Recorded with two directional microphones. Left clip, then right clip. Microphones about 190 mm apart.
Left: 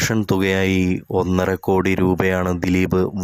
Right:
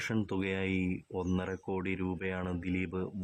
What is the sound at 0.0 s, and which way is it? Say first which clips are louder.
Speech: left 15 dB; 40° left (ahead or behind).